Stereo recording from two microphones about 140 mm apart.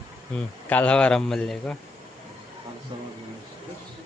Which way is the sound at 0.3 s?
10° left (ahead or behind).